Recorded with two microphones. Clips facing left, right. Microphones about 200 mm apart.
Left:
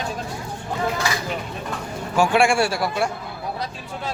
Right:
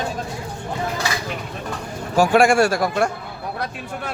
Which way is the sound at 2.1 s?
40° right (ahead or behind).